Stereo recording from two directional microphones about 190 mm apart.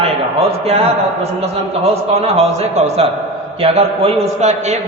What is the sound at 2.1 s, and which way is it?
A man's voice, 35° right (ahead or behind).